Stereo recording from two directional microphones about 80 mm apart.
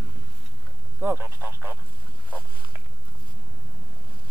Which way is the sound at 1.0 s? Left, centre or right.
Right.